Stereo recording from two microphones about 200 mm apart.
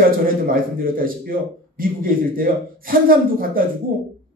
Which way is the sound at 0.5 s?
45° right (ahead or behind).